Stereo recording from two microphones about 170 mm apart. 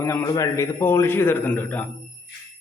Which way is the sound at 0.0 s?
15° left (ahead or behind).